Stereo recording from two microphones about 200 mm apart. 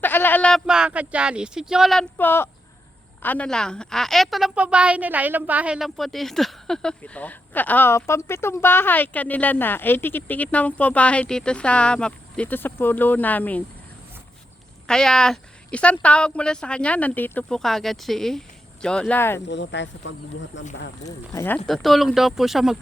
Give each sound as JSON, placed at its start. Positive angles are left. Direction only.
{"t": 0.0, "sound": "a woman's voice", "side_deg": 10}
{"t": 14.8, "sound": "a woman's voice", "side_deg": 5}
{"t": 19.5, "sound": "speech", "side_deg": 60}
{"t": 21.0, "sound": "a woman's voice", "side_deg": 15}